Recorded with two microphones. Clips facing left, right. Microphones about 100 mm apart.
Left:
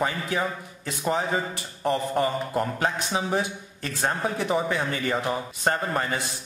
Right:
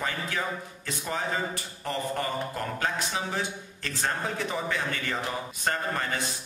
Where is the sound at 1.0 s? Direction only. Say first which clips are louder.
Left 5 dB; 25° left (ahead or behind).